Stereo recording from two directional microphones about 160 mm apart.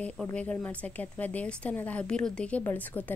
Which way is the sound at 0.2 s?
10° left (ahead or behind).